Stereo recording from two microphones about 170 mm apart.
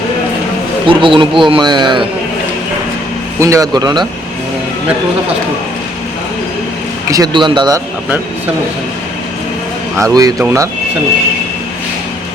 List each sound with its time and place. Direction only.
0.9 s a man's voice: 30° right (ahead or behind)
3.4 s a man's voice: 20° right (ahead or behind)
7.1 s a man's voice: 25° right (ahead or behind)
10.2 s a man's voice: 20° right (ahead or behind)